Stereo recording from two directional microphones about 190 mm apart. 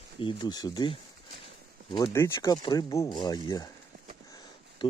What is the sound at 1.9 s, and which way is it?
Speech, 15° left (ahead or behind).